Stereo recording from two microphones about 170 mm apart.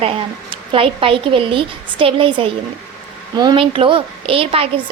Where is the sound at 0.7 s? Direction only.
30° right (ahead or behind).